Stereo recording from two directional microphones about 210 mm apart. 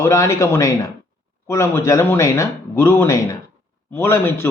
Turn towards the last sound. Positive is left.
turn(degrees=10)  # may be behind; listen again after turning